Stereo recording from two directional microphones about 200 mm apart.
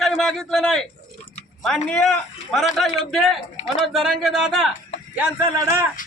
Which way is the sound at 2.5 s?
Centre (ahead or behind).